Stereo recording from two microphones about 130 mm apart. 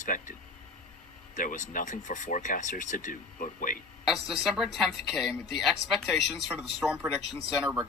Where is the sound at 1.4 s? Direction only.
90° left.